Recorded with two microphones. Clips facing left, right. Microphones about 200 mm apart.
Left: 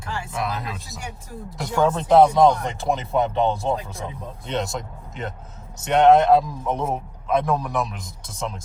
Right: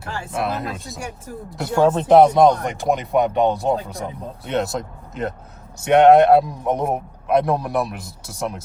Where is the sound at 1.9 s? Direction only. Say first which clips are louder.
Right 3 dB; 20° right (ahead or behind).